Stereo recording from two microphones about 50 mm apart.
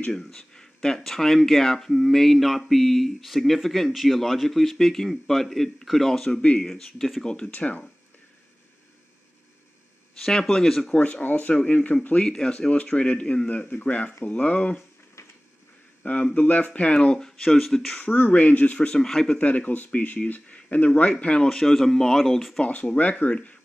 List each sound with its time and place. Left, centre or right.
0.1 s speech: centre
7.2 s speech: centre
10.5 s speech: centre
11.0 s speech: left
16.0 s speech: left; by 18.0 s centre
18.0 s speech: left
18.9 s speech: centre
19.3 s speech: left
21.5 s speech: centre
22.6 s speech: left